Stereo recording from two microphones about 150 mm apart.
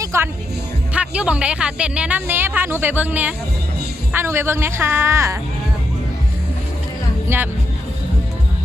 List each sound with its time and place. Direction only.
0.0 s speech: 20° right (ahead or behind)
0.9 s speech: 5° right (ahead or behind)
7.3 s speech: 15° right (ahead or behind)